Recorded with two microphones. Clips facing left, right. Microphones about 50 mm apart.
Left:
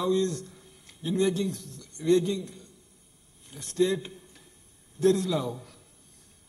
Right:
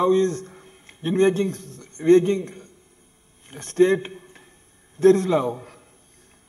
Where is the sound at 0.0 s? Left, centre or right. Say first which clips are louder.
Right 7 dB; right.